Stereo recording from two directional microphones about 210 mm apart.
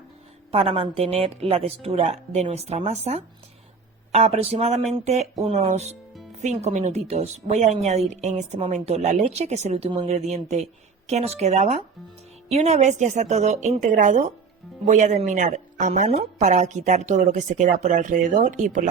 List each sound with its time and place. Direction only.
0.5 s a woman's voice: 30° right (ahead or behind)